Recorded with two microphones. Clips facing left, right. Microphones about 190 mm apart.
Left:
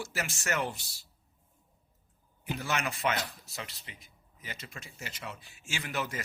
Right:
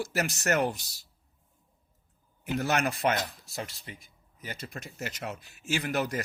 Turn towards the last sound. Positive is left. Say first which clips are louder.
# right 6 dB
turn(degrees=-40)  # may be behind; listen again after turning